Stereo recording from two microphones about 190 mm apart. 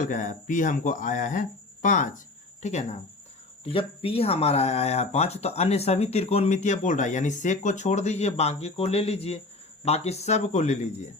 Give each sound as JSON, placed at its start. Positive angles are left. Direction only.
{"t": 0.0, "sound": "speech", "side_deg": 40}